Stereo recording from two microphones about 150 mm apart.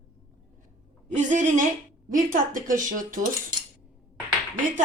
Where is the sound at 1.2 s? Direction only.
55° right (ahead or behind).